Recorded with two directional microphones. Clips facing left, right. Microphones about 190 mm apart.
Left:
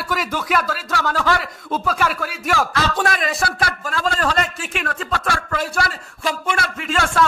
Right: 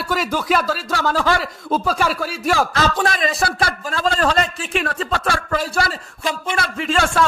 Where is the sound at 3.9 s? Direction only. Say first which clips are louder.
Right 3 dB; 35° right (ahead or behind).